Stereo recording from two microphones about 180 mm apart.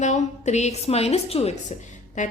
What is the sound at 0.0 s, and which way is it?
A woman's voice, 40° left (ahead or behind).